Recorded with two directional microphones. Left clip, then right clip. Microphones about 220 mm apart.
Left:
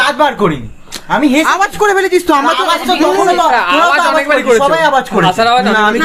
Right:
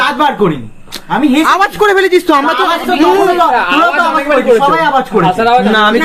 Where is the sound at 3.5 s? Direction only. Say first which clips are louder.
Even; 35° left (ahead or behind).